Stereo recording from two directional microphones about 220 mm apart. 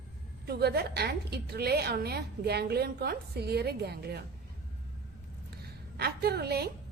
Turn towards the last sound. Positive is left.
turn(degrees=-45)  # may be behind; listen again after turning